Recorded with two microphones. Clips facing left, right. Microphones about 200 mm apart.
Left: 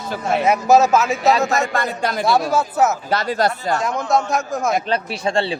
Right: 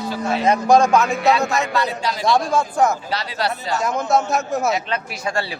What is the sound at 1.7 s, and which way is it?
Speech, 50° left (ahead or behind).